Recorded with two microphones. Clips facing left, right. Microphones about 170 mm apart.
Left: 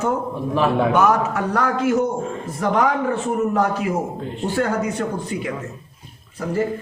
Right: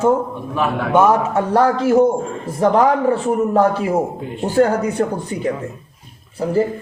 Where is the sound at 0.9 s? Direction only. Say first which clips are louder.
Right 4 dB; 25° right (ahead or behind).